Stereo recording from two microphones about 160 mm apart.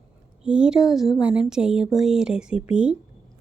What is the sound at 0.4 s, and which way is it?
Speech, 5° right (ahead or behind).